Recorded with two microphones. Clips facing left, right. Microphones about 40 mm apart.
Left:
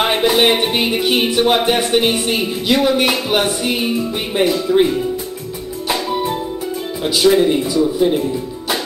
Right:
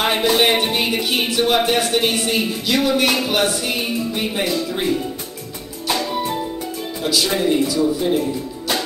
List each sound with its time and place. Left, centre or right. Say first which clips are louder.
0.0 s music: left 3 dB; centre
1.0 s speech: left 4 dB; left
5.9 s music: left 2 dB; centre
7.2 s a man's voice: left 8 dB; centre